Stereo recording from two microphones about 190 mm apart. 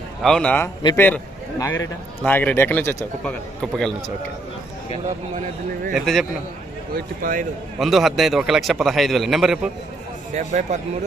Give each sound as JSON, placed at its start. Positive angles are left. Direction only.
{"t": 0.2, "sound": "a man's voice", "side_deg": 5}
{"t": 3.6, "sound": "speech", "side_deg": 5}
{"t": 5.9, "sound": "speech", "side_deg": 0}
{"t": 6.9, "sound": "speech", "side_deg": -45}
{"t": 7.8, "sound": "speech", "side_deg": 0}
{"t": 10.3, "sound": "speech", "side_deg": -40}